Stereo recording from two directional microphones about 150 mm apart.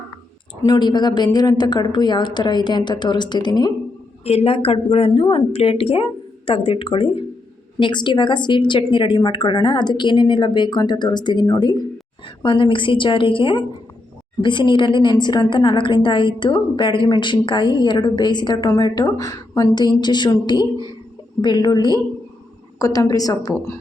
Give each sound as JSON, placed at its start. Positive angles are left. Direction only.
{"t": 0.6, "sound": "a woman's voice", "side_deg": 25}
{"t": 4.2, "sound": "a woman's voice", "side_deg": 45}